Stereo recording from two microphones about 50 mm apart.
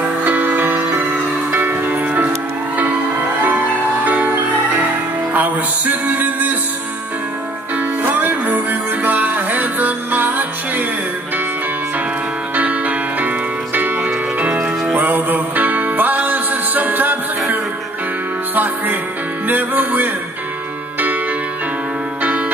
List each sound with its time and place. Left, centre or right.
0.2 s music: right
3.4 s music: right
5.3 s music: right
8.0 s music: right
12.5 s music: right
15.0 s music: right